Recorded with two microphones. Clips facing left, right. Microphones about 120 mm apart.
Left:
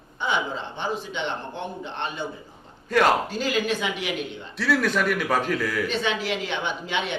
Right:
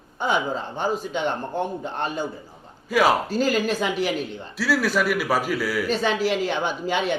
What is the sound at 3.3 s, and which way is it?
Speech, 40° right (ahead or behind).